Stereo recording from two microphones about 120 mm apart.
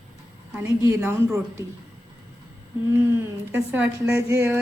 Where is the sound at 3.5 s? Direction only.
15° right (ahead or behind).